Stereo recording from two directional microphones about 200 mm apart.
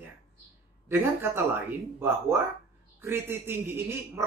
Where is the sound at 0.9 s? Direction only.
10° right (ahead or behind).